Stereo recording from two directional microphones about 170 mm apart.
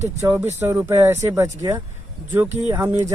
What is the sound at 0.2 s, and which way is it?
Speech, 15° right (ahead or behind).